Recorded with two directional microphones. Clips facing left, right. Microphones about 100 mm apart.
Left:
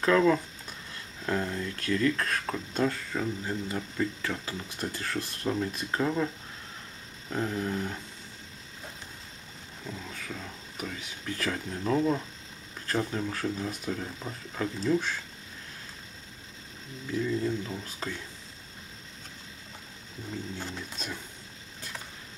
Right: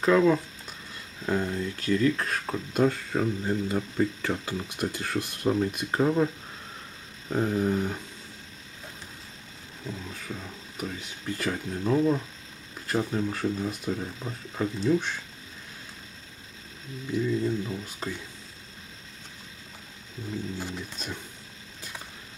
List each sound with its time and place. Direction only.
0.0 s a sound: 5° right (ahead or behind)
1.2 s speech: 10° right (ahead or behind)
2.1 s speech: 5° right (ahead or behind)
3.1 s speech: 30° right (ahead or behind)
4.6 s speech: 15° right (ahead or behind)
5.9 s speech: 25° right (ahead or behind)
7.4 s speech: 15° right (ahead or behind)
9.8 s speech: 5° right (ahead or behind)
17.1 s speech: 5° right (ahead or behind)
20.5 s speech: 5° right (ahead or behind)